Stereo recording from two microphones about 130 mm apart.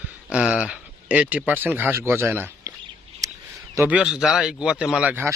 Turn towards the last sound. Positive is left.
turn(degrees=-5)  # may be behind; listen again after turning